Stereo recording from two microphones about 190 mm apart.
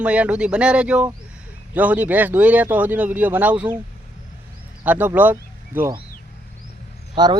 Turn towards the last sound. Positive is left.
turn(degrees=-20)  # may be behind; listen again after turning